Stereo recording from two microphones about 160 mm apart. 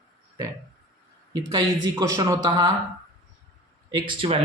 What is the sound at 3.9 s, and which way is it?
Speech, 30° right (ahead or behind).